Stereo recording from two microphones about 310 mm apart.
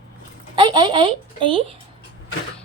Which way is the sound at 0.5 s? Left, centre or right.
Centre.